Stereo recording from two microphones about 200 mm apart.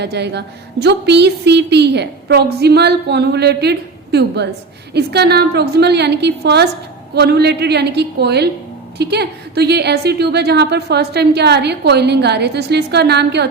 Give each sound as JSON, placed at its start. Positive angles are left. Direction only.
{"t": 0.0, "sound": "a woman's voice", "side_deg": -60}